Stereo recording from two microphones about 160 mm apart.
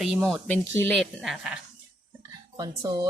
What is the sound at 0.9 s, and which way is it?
Speech, centre (ahead or behind).